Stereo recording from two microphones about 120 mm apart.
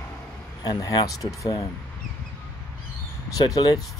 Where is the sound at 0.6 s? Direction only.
35° left (ahead or behind).